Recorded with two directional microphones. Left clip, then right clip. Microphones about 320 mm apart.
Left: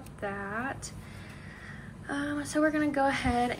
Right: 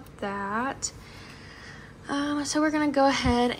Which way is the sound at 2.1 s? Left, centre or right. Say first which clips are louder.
Right 5 dB; centre.